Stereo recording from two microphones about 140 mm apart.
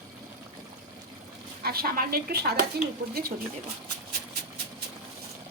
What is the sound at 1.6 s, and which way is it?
Speech, 90° right.